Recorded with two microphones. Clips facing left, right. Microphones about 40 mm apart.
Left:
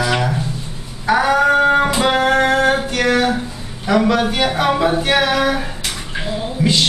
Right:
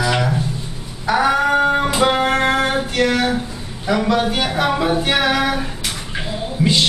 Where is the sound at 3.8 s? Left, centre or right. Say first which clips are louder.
Left 2 dB; centre.